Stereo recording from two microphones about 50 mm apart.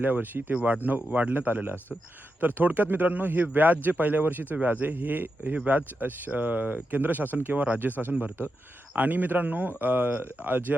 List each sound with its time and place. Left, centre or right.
0.0 s speech: right